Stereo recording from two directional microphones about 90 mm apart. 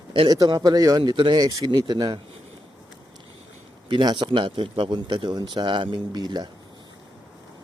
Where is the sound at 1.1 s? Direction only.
60° right (ahead or behind).